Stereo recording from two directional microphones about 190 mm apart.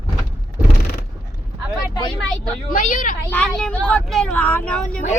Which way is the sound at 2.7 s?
45° left (ahead or behind).